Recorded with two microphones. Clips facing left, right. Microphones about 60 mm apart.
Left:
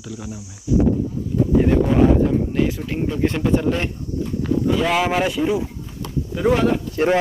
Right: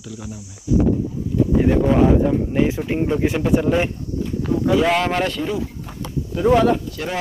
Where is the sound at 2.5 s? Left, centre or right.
Centre.